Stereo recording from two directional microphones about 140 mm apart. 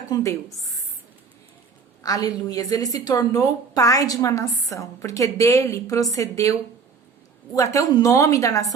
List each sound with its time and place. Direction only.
0.1 s a woman's voice: 20° left (ahead or behind)
2.0 s a woman's voice: 25° left (ahead or behind)